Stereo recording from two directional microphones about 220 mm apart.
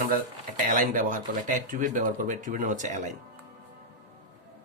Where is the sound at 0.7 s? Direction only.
40° right (ahead or behind).